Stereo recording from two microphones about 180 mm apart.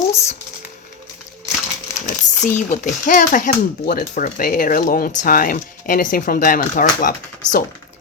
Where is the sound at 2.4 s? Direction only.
45° left (ahead or behind).